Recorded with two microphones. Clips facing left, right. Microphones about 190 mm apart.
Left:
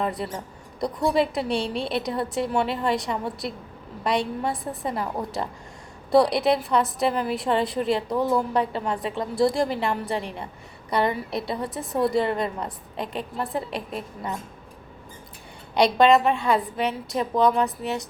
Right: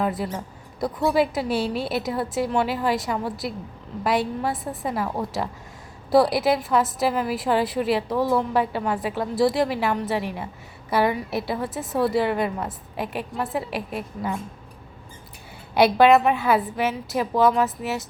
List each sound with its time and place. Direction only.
0.0 s a woman's voice: centre (ahead or behind)
15.7 s a woman's voice: 5° right (ahead or behind)